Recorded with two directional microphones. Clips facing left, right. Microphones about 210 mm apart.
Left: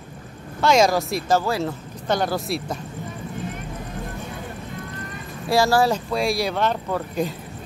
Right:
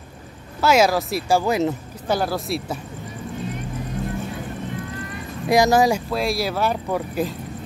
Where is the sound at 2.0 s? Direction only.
5° right (ahead or behind).